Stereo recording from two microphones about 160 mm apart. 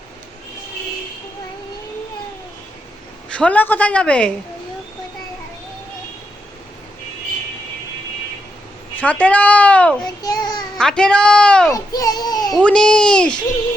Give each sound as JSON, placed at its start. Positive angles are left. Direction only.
{"t": 3.3, "sound": "speech", "side_deg": 10}
{"t": 9.0, "sound": "speech", "side_deg": 10}
{"t": 10.0, "sound": "a child's voice", "side_deg": 25}
{"t": 10.8, "sound": "speech", "side_deg": 5}
{"t": 11.7, "sound": "a child's voice", "side_deg": 20}
{"t": 12.5, "sound": "speech", "side_deg": 5}